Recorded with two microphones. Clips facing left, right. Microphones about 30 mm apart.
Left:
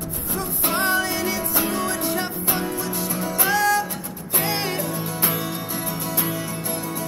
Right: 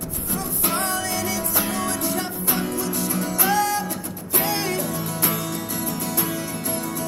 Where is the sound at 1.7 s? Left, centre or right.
Centre.